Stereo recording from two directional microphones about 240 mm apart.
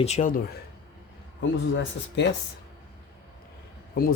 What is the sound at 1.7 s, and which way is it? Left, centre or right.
Speech, left.